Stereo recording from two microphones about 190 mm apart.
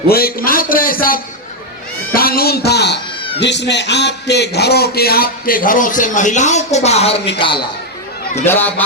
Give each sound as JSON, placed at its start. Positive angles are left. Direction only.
{"t": 0.1, "sound": "a man's voice", "side_deg": 50}
{"t": 8.4, "sound": "speech", "side_deg": 10}